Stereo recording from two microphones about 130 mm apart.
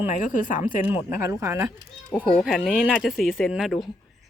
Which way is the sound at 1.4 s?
20° right (ahead or behind).